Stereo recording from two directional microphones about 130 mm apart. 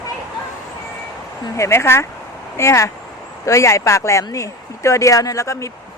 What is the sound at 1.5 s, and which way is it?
A woman's voice, 20° left (ahead or behind).